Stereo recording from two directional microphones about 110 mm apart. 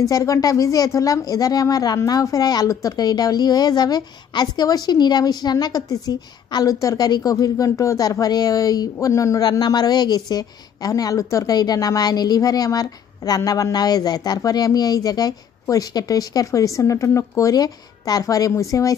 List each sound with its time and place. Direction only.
0.0 s a woman's voice: 30° left (ahead or behind)